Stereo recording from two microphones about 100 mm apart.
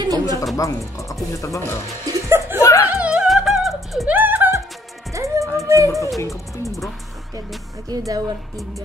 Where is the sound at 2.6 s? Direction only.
30° left (ahead or behind).